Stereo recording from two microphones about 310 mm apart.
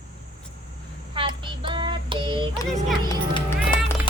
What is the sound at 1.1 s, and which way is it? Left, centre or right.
Child singing, centre.